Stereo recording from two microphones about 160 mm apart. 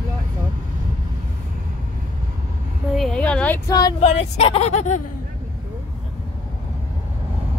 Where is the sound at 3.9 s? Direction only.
40° left (ahead or behind).